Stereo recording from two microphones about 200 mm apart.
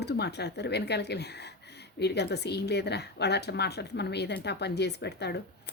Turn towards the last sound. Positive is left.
turn(degrees=55)  # may be behind; listen again after turning